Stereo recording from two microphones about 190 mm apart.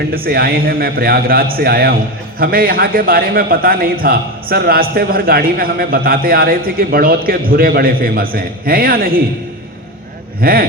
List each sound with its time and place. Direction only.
0.1 s a man's voice: 55° right (ahead or behind)
10.4 s a man's voice: 50° right (ahead or behind)